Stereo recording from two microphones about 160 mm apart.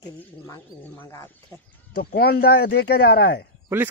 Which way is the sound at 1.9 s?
70° left (ahead or behind).